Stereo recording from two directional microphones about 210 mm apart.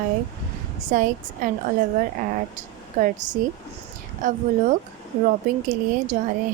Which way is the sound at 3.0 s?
35° right (ahead or behind).